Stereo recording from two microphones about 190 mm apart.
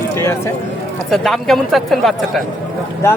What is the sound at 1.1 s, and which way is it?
Speech, centre (ahead or behind).